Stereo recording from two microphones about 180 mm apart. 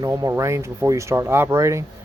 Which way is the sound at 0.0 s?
15° right (ahead or behind).